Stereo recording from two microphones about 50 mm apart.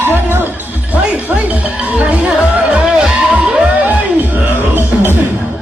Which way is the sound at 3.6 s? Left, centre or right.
Right.